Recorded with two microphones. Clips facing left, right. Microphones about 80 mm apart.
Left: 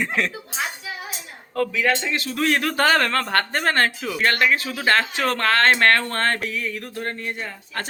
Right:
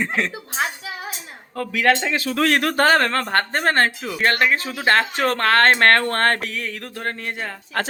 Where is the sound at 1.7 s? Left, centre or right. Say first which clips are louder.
Right 7 dB; right.